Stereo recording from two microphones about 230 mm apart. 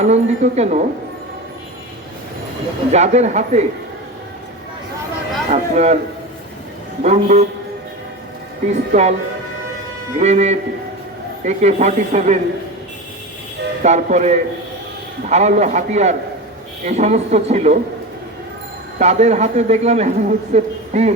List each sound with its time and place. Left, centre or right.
0.0 s a man's voice: right
2.9 s a man's voice: right
5.5 s a man's voice: right
7.0 s a man's voice: right
8.7 s a man's voice: right
10.2 s a man's voice: right
13.8 s a man's voice: right
18.9 s a man's voice: right